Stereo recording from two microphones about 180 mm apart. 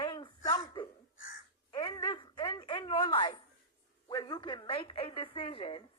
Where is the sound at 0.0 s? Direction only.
25° left (ahead or behind).